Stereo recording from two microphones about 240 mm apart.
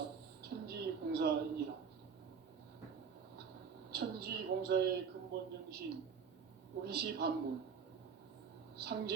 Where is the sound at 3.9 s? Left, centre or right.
Right.